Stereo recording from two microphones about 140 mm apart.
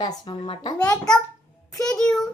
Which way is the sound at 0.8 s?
5° left (ahead or behind).